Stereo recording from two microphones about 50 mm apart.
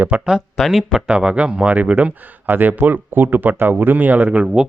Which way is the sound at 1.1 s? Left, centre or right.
Centre.